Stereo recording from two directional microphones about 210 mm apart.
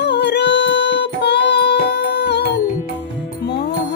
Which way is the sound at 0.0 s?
55° left (ahead or behind).